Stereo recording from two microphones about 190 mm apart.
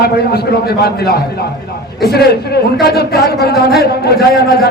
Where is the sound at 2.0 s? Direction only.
55° left (ahead or behind).